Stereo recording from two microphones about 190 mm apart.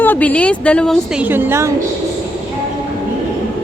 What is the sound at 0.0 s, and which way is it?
Speech, 10° left (ahead or behind).